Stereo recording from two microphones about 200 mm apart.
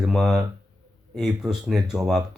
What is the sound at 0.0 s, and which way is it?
Speech, centre (ahead or behind).